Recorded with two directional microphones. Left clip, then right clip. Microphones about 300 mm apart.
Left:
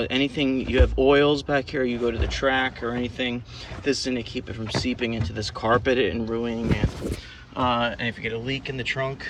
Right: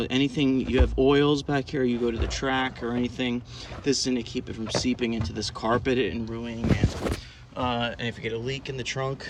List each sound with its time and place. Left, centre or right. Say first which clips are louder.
0.0 s speech: left 2 dB; centre